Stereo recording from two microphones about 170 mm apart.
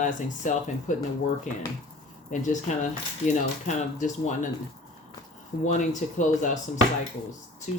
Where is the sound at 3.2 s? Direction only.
45° left (ahead or behind).